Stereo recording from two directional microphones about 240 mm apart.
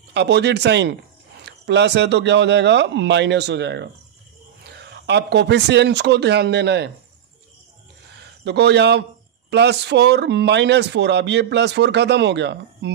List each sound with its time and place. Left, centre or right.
0.1 s speech: right
8.4 s speech: right